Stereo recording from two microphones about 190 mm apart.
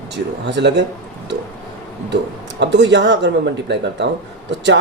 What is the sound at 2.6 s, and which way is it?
A man's voice, 70° right (ahead or behind).